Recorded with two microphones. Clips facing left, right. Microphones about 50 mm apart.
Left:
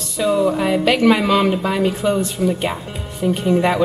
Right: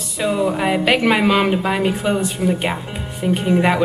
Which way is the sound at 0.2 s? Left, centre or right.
Centre.